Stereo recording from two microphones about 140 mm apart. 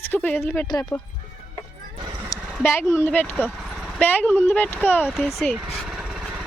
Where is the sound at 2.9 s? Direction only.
15° left (ahead or behind).